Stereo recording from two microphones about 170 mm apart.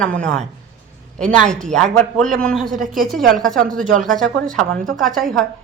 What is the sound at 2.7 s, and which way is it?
Speech, 50° right (ahead or behind).